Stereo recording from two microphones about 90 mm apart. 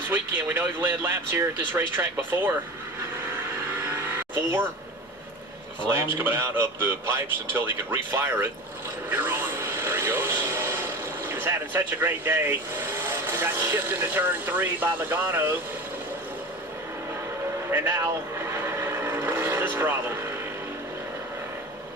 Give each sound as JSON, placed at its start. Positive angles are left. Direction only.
{"t": 0.1, "sound": "speech", "side_deg": -20}
{"t": 3.8, "sound": "vehicle", "side_deg": -25}
{"t": 5.9, "sound": "speech", "side_deg": -25}
{"t": 9.0, "sound": "vehicle", "side_deg": -20}
{"t": 17.7, "sound": "vehicle", "side_deg": -25}